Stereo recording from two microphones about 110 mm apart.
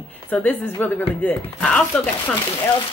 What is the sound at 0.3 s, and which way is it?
Speech, 15° left (ahead or behind).